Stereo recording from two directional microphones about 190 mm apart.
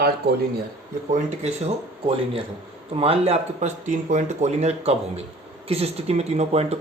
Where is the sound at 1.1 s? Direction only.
35° right (ahead or behind).